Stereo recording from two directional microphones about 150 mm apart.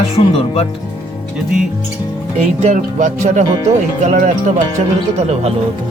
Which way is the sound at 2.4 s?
45° right (ahead or behind).